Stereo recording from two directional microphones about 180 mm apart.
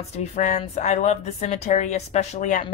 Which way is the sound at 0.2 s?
40° left (ahead or behind).